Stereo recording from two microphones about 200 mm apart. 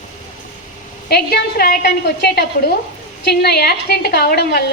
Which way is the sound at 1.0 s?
50° left (ahead or behind).